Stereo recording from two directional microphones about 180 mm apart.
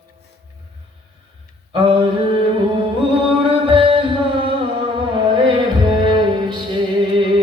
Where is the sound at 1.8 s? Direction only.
25° right (ahead or behind).